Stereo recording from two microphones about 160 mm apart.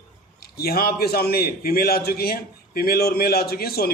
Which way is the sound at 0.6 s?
75° left (ahead or behind).